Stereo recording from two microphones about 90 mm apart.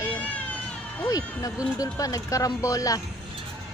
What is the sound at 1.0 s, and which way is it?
Speech, 40° left (ahead or behind).